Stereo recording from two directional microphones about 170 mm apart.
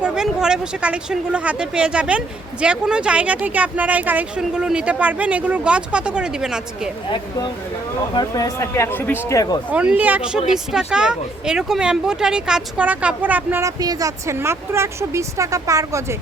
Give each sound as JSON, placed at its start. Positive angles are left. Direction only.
{"t": 0.0, "sound": "speech", "side_deg": -5}
{"t": 8.1, "sound": "speech", "side_deg": 25}
{"t": 9.7, "sound": "speech", "side_deg": -10}